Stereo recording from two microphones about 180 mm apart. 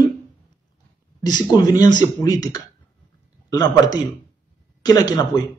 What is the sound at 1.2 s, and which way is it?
Speech, 20° left (ahead or behind).